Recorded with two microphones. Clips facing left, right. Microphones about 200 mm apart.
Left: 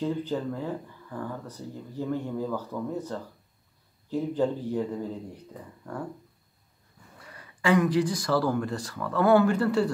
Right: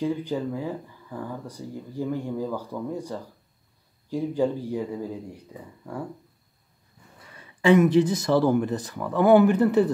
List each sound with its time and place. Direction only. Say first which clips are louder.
0.0 s speech: right 2 dB; 10° right (ahead or behind)
7.6 s speech: right 5 dB; 25° right (ahead or behind)